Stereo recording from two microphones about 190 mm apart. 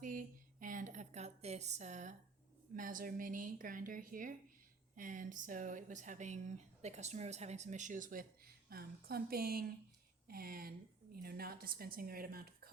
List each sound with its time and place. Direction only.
0.0 s a woman's voice: 45° right (ahead or behind)